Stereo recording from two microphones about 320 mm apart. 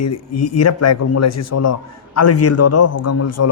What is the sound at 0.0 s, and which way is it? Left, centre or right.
A man's voice, left.